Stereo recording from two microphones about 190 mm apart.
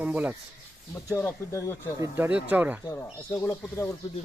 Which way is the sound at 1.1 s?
10° left (ahead or behind).